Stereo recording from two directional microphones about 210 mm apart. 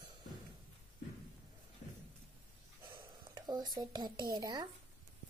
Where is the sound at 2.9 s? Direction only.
20° right (ahead or behind).